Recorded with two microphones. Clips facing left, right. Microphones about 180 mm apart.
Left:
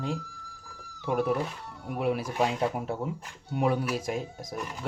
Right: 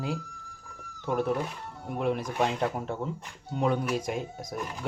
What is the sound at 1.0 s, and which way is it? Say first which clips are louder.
Speech: left 1 dB; 10° left (ahead or behind).